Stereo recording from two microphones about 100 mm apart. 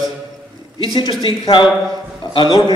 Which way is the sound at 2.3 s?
55° left (ahead or behind).